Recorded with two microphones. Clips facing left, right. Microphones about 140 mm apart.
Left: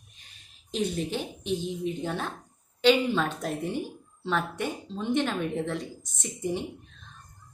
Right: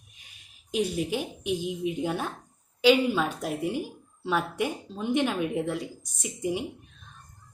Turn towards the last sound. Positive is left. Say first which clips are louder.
# right 1 dB
turn(degrees=-10)  # may be behind; listen again after turning